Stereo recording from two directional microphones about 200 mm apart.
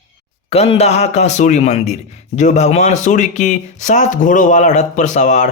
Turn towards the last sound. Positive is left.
turn(degrees=35)  # may be behind; listen again after turning